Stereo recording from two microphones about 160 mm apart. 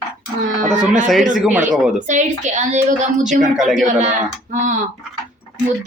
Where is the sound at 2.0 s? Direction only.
50° right (ahead or behind).